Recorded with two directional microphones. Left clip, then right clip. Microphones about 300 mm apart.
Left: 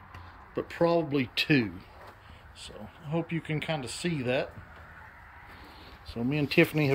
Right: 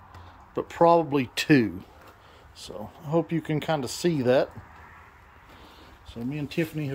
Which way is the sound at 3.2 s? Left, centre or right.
Centre.